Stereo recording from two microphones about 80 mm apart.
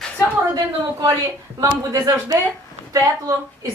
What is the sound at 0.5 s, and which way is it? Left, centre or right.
A woman's voice, right.